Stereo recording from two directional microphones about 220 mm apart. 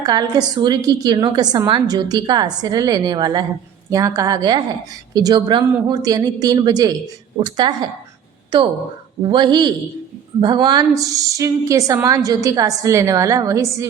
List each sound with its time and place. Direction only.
0.0 s a woman's voice: 15° right (ahead or behind)